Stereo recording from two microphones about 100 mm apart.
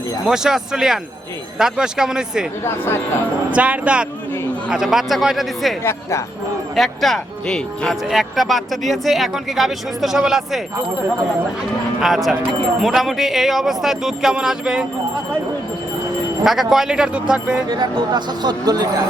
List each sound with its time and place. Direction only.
0.3 s speech: 5° right (ahead or behind)
2.6 s a woman's voice: 20° left (ahead or behind)
3.5 s speech: 15° right (ahead or behind)
5.8 s a woman's voice: 25° left (ahead or behind)
6.7 s speech: centre (ahead or behind)
11.9 s speech: 5° right (ahead or behind)
16.4 s speech: 5° right (ahead or behind)
17.7 s speech: 45° right (ahead or behind)